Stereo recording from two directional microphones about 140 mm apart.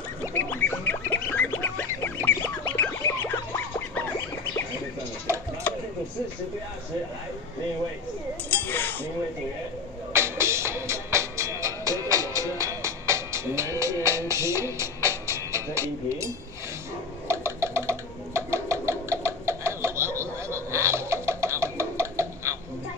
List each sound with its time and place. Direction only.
0.2 s music: 15° left (ahead or behind)
8.5 s cutlery: 15° left (ahead or behind)
10.1 s music: 20° right (ahead or behind)
17.3 s a sound: 20° right (ahead or behind)